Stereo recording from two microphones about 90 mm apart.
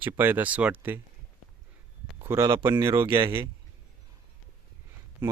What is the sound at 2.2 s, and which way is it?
Speech, 30° right (ahead or behind).